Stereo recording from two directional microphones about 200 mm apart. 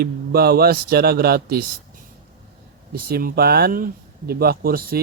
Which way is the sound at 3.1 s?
50° right (ahead or behind).